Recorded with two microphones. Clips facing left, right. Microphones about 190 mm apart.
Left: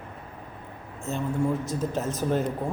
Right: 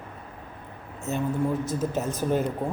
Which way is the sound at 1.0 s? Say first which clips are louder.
Right 1 dB; centre (ahead or behind).